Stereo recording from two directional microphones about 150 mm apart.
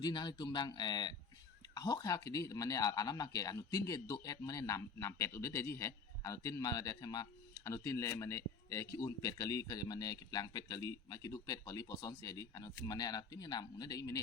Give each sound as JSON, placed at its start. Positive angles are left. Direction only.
{"t": 0.0, "sound": "speech", "side_deg": 30}